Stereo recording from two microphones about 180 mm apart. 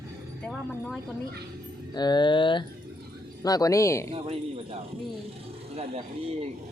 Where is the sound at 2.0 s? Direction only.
25° left (ahead or behind).